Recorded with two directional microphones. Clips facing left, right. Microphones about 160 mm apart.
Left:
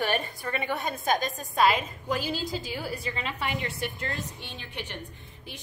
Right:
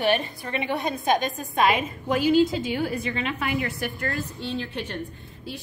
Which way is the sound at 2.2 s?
35° left (ahead or behind).